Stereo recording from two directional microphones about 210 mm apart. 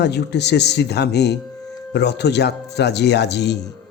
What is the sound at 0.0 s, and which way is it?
Speech, 55° left (ahead or behind).